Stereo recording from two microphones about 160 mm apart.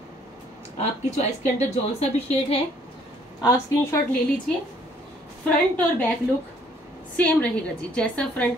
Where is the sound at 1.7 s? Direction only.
40° left (ahead or behind).